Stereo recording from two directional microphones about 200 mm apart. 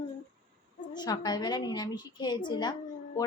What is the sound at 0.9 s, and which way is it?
A child's voice, 20° left (ahead or behind).